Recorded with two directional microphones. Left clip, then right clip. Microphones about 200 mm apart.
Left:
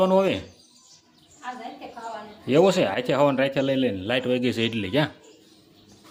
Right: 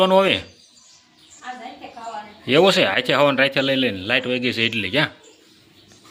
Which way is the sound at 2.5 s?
Centre (ahead or behind).